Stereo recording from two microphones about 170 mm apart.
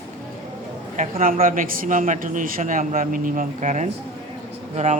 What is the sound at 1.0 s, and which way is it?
Speech, 50° right (ahead or behind).